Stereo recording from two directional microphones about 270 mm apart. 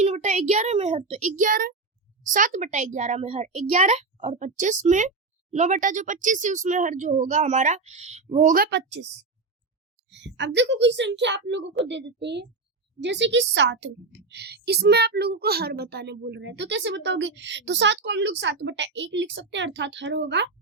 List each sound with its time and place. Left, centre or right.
0.0 s a child's voice: right
10.1 s a woman's voice: right